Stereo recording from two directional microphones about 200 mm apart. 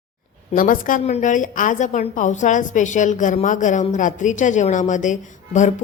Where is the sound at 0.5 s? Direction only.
45° left (ahead or behind).